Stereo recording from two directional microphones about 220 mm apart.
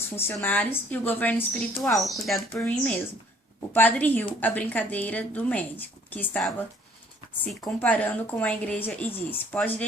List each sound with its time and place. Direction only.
0.2 s a woman's voice: 10° left (ahead or behind)